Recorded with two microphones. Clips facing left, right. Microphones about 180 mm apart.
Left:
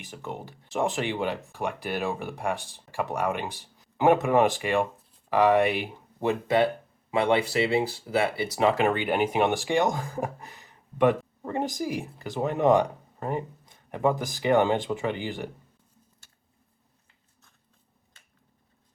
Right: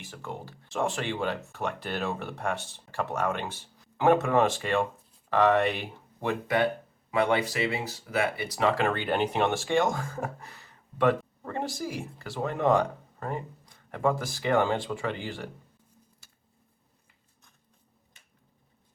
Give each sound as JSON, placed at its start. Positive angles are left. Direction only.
{"t": 0.0, "sound": "speech", "side_deg": 20}
{"t": 6.2, "sound": "speech", "side_deg": 25}